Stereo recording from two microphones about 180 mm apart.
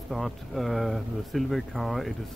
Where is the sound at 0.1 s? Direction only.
Centre (ahead or behind).